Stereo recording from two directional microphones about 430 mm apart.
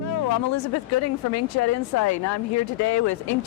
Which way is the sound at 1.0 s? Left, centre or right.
Left.